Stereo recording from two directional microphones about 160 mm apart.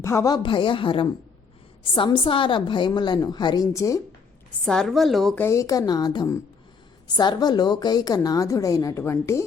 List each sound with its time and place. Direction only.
0.0 s a woman's voice: 20° left (ahead or behind)
4.6 s speech: 5° left (ahead or behind)
5.4 s a woman's voice: 20° left (ahead or behind)